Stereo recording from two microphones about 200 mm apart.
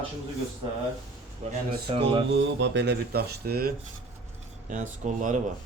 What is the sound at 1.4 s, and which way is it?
Speech, 35° right (ahead or behind).